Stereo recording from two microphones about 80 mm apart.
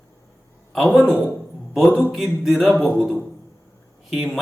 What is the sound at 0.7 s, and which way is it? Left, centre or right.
Music, centre.